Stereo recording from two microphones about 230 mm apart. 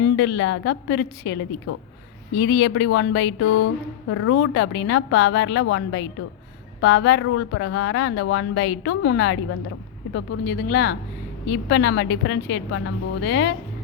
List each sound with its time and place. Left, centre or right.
0.2 s a woman's voice: left